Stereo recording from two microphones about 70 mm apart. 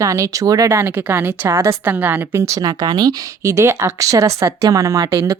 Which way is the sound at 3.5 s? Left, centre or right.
Right.